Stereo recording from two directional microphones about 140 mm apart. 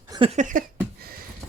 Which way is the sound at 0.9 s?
90° right.